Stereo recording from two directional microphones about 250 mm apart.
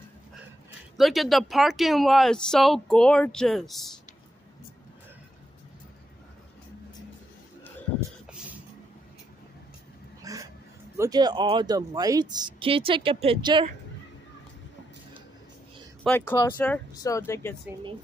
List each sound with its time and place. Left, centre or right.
0.9 s speech: centre
10.2 s a sound: centre
11.0 s speech: centre
16.0 s speech: centre